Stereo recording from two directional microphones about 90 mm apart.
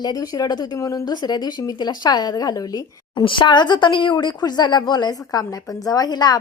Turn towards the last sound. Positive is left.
turn(degrees=50)  # may be behind; listen again after turning